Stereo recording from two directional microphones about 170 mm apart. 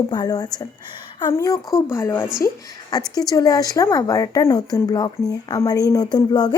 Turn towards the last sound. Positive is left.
turn(degrees=25)  # may be behind; listen again after turning